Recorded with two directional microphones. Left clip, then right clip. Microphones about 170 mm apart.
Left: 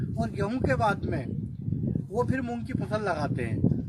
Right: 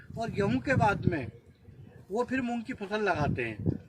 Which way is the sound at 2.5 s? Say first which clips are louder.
Left 2 dB; 20° left (ahead or behind).